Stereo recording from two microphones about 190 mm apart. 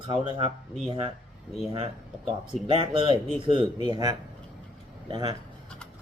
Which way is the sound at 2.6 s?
30° right (ahead or behind).